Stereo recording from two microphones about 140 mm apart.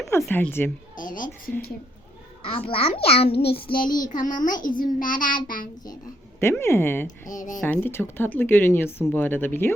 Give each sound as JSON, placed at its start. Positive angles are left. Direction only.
{"t": 0.0, "sound": "speech", "side_deg": 20}
{"t": 0.9, "sound": "child singing", "side_deg": 70}
{"t": 2.4, "sound": "a child's voice", "side_deg": 40}
{"t": 3.7, "sound": "child singing", "side_deg": 80}
{"t": 4.2, "sound": "child singing", "side_deg": 70}
{"t": 6.4, "sound": "speech", "side_deg": 20}
{"t": 7.3, "sound": "child singing", "side_deg": 65}
{"t": 7.6, "sound": "speech", "side_deg": 15}